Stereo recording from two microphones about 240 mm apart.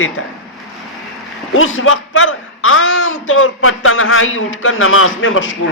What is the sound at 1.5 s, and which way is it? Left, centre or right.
Speech, left.